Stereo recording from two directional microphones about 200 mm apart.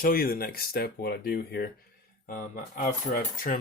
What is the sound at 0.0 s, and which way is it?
Speech, 45° left (ahead or behind).